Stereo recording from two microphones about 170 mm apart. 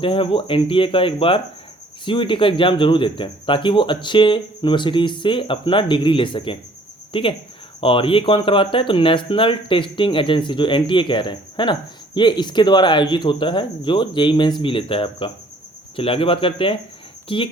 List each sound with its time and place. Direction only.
0.0 s speech: 30° left (ahead or behind)